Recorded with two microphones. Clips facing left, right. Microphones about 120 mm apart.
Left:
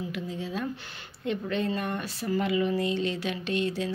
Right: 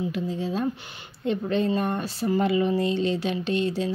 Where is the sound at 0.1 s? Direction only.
30° right (ahead or behind).